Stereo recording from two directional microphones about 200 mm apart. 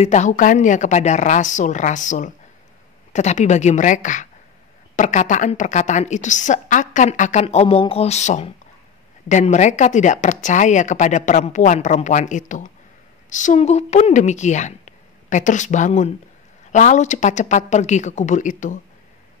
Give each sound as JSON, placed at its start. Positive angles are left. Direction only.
{"t": 0.0, "sound": "a woman's voice", "side_deg": 35}